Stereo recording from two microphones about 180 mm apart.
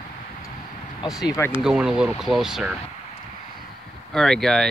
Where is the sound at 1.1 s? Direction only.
Centre (ahead or behind).